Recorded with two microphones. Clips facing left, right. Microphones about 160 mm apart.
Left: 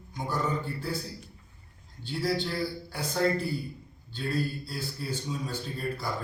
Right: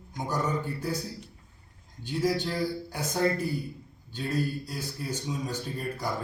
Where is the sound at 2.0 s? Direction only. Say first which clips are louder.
Right 2 dB; 15° right (ahead or behind).